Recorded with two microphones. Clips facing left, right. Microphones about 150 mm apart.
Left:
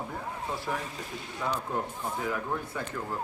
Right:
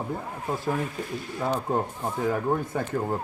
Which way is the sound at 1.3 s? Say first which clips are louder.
Right 5 dB; 45° right (ahead or behind).